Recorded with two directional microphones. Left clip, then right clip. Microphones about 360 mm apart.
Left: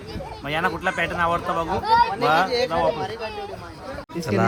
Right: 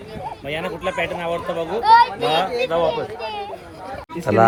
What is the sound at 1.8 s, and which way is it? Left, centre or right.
Speech, right.